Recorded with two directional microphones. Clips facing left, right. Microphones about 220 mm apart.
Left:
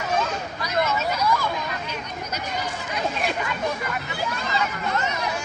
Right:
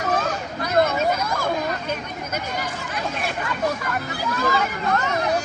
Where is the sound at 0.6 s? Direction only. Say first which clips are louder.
Right 5 dB; 50° right (ahead or behind).